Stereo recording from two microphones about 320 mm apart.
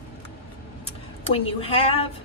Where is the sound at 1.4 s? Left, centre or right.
Centre.